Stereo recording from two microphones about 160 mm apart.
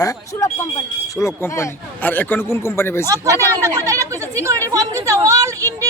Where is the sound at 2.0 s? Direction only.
10° left (ahead or behind).